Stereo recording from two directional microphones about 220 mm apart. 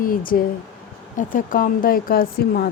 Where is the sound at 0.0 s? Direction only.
40° left (ahead or behind).